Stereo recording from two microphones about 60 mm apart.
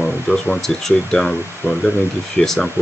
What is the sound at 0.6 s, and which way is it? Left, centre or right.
Speech, centre.